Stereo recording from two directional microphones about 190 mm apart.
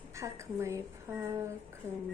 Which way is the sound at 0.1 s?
15° right (ahead or behind).